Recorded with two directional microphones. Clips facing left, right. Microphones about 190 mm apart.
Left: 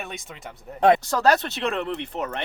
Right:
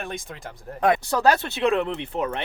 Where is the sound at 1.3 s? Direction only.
10° right (ahead or behind).